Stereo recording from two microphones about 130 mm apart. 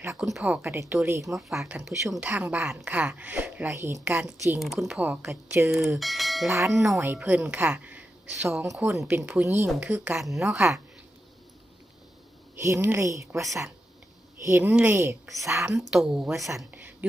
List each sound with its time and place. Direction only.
0.2 s a woman's voice: 5° right (ahead or behind)
0.6 s a woman's voice: 15° right (ahead or behind)
1.4 s a woman's voice: centre (ahead or behind); by 4.0 s 20° right (ahead or behind)
4.0 s a woman's voice: 5° right (ahead or behind)
4.9 s a woman's voice: 10° right (ahead or behind)
5.7 s a woman's voice: centre (ahead or behind)
7.0 s a woman's voice: 15° right (ahead or behind)
8.4 s a woman's voice: 20° right (ahead or behind); by 10.8 s 5° right (ahead or behind)
12.5 s a woman's voice: 20° right (ahead or behind)
15.8 s a woman's voice: 5° right (ahead or behind)
16.7 s a sound: 10° right (ahead or behind)